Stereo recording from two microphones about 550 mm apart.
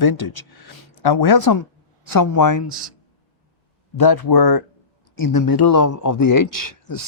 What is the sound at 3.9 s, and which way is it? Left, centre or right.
Speech, left.